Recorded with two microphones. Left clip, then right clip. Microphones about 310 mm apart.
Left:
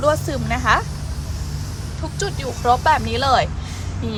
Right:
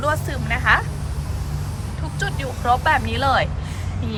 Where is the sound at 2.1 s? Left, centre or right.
Centre.